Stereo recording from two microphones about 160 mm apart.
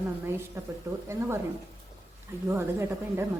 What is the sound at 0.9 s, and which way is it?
Speech, 15° right (ahead or behind).